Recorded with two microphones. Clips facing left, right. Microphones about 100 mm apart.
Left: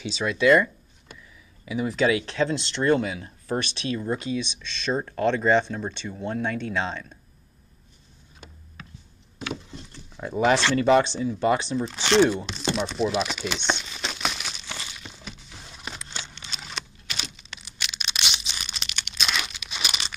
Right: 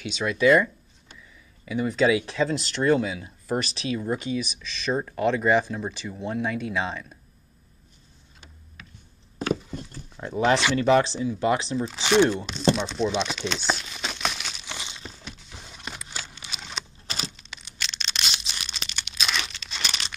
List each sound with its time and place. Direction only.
0.2 s speech: centre (ahead or behind)
1.7 s speech: 5° left (ahead or behind)
10.1 s speech: centre (ahead or behind)
12.3 s crumpling: centre (ahead or behind)
14.7 s a sound: 20° right (ahead or behind)
15.0 s a sound: centre (ahead or behind)
19.6 s crumpling: 10° left (ahead or behind)